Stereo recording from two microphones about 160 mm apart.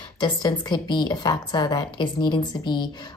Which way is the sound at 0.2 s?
25° left (ahead or behind).